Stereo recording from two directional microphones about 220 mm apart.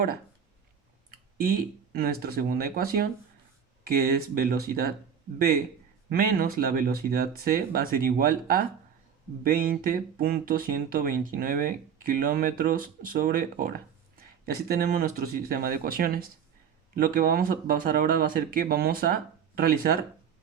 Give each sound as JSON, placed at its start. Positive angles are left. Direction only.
{"t": 1.4, "sound": "speech", "side_deg": -40}
{"t": 6.1, "sound": "speech", "side_deg": -40}